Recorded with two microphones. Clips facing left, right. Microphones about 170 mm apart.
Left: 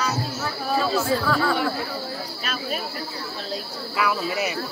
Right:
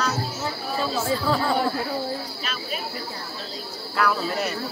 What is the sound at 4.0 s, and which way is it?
Speech, 5° left (ahead or behind).